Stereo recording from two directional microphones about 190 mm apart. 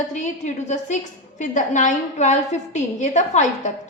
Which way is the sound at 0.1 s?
40° left (ahead or behind).